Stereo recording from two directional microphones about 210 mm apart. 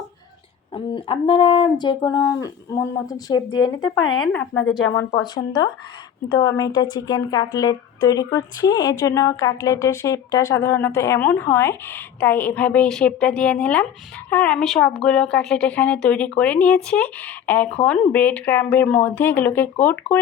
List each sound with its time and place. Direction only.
0.7 s speech: 25° left (ahead or behind)
3.8 s speech: 80° left
4.2 s speech: 5° left (ahead or behind)
4.9 s a woman's voice: 15° left (ahead or behind)